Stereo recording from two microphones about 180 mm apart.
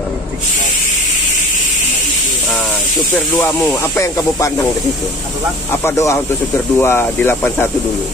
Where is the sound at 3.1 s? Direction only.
5° left (ahead or behind).